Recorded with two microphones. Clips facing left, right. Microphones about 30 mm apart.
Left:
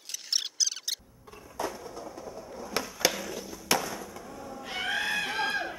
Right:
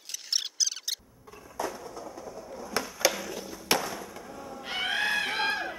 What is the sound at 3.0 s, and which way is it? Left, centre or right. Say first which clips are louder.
Skateboard: right 1 dB; centre.